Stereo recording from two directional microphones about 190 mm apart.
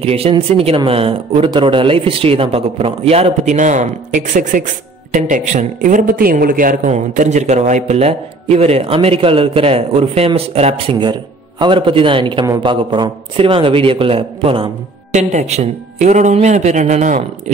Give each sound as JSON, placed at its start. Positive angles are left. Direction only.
{"t": 0.0, "sound": "a man's voice", "side_deg": -30}